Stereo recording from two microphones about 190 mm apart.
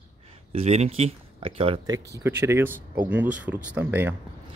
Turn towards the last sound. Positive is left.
turn(degrees=-10)  # may be behind; listen again after turning